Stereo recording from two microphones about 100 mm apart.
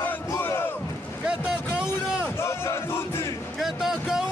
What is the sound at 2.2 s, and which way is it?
Crowd, 25° left (ahead or behind).